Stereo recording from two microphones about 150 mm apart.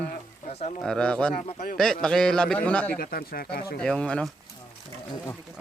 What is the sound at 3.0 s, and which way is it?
Speech, 80° left.